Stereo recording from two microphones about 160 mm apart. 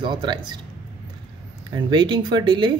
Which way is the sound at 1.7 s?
30° right (ahead or behind).